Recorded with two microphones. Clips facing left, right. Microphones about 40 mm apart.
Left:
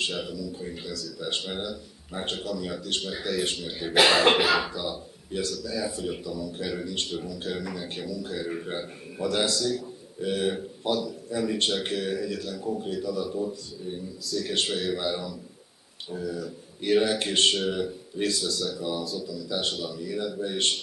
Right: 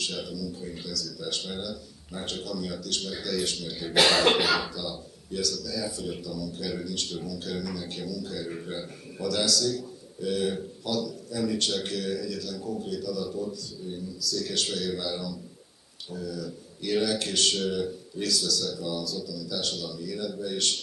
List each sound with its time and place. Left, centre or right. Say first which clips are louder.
0.0 s a man's voice: left 3 dB; left
3.9 s speech: left 2 dB; centre
4.7 s a man's voice: left 3 dB; left